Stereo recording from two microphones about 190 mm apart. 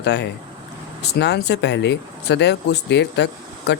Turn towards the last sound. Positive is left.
turn(degrees=65)  # may be behind; listen again after turning